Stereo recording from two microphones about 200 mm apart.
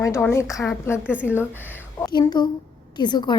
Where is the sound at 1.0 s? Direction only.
5° right (ahead or behind).